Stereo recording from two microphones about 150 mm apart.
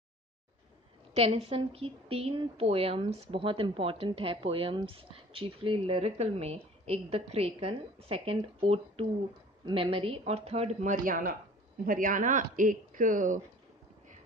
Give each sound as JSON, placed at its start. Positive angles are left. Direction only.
{"t": 1.1, "sound": "a woman's voice", "side_deg": -45}